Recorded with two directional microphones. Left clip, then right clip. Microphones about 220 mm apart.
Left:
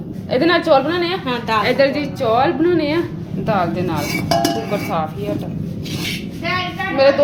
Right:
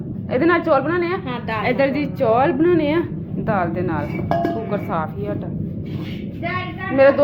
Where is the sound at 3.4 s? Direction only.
15° left (ahead or behind).